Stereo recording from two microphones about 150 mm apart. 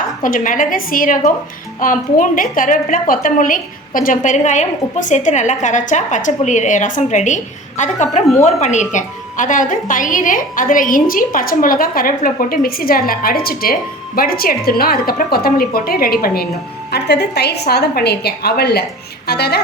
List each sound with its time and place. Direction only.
0.2 s a woman's voice: 65° left (ahead or behind); by 19.6 s 90° left